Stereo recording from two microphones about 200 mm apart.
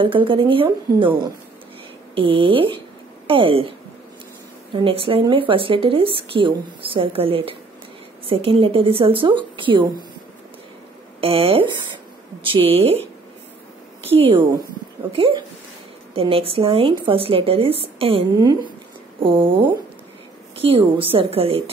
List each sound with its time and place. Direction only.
0.0 s speech: 25° right (ahead or behind)
4.8 s speech: 25° right (ahead or behind)
11.1 s speech: 30° right (ahead or behind)
14.1 s speech: 30° right (ahead or behind)
20.5 s speech: 30° right (ahead or behind)